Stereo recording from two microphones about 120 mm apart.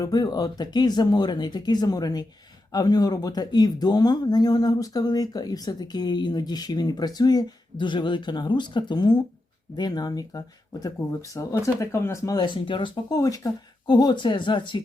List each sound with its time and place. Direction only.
0.0 s speech: 35° left (ahead or behind)
12.5 s speech: 45° left (ahead or behind)